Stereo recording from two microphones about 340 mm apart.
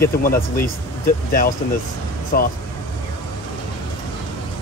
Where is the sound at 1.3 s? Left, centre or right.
Left.